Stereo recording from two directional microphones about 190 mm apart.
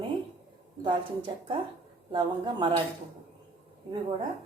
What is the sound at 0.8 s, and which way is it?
Speech, 25° right (ahead or behind).